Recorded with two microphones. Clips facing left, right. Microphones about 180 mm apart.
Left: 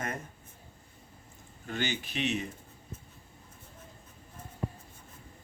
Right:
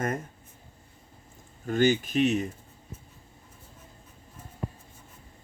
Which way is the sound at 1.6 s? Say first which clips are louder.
Right 11 dB; 45° right (ahead or behind).